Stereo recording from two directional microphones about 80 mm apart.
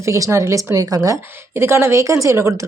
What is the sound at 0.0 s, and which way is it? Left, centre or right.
Speech, right.